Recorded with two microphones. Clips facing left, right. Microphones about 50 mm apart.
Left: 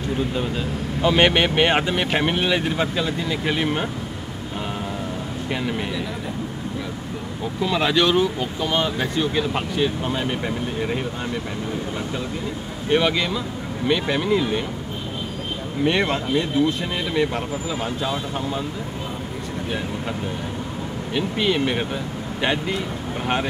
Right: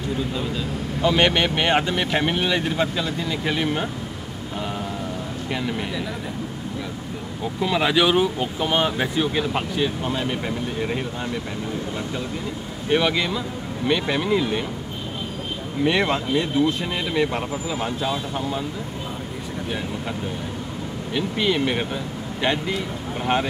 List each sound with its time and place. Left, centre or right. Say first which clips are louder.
1.0 s speech: left 2 dB; centre
5.5 s speech: left 1 dB; centre
7.6 s speech: even; centre
12.9 s speech: left 1 dB; centre
15.8 s speech: even; centre
21.1 s speech: left 1 dB; centre